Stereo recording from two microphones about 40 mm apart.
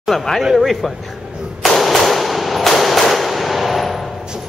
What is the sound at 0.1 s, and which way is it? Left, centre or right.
Speech, centre.